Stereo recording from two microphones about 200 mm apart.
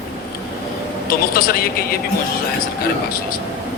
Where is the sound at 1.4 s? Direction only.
45° left (ahead or behind).